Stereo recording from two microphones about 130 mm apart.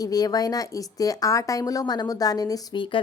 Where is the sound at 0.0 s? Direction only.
30° left (ahead or behind).